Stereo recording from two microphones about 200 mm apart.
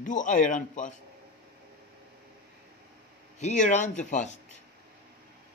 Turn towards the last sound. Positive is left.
turn(degrees=35)  # may be behind; listen again after turning